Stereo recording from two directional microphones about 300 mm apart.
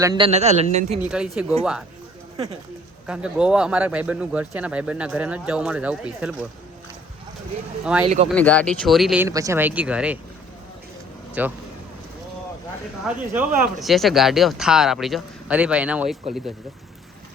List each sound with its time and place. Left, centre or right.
0.0 s a man's voice: centre
0.9 s speech: centre
3.1 s speech: centre
8.0 s a man's voice: centre
8.3 s speech: centre
11.4 s speech: centre
13.3 s speech: centre